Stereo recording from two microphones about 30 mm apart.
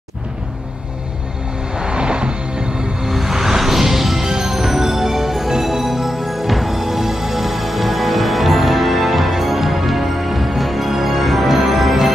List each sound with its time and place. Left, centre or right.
1.8 s music: right
3.0 s music: centre